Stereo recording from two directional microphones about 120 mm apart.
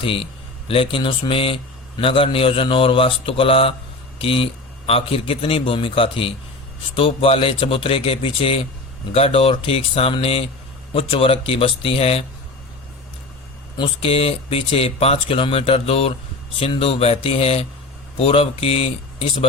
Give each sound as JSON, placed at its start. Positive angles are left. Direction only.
{"t": 0.0, "sound": "a man's voice", "side_deg": 50}
{"t": 13.7, "sound": "a man's voice", "side_deg": 50}